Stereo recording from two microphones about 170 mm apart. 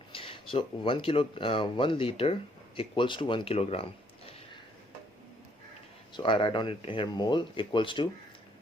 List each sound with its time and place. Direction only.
0.1 s speech: 30° left (ahead or behind)
6.1 s speech: 30° left (ahead or behind)